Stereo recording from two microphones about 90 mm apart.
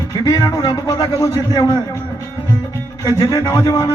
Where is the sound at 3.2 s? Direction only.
50° left (ahead or behind).